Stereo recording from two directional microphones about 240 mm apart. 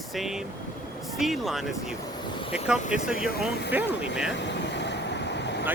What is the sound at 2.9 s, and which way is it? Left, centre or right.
Speech, centre.